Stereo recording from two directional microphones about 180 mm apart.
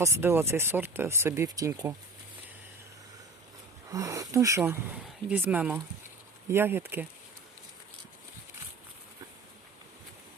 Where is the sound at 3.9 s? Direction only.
20° right (ahead or behind).